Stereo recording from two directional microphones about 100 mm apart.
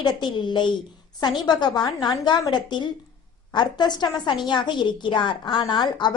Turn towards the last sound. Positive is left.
turn(degrees=50)  # may be behind; listen again after turning